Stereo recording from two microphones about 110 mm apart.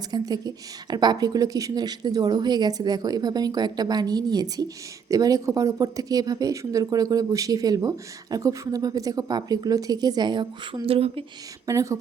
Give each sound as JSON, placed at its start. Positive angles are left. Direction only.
{"t": 0.1, "sound": "speech", "side_deg": -35}
{"t": 11.6, "sound": "speech", "side_deg": -30}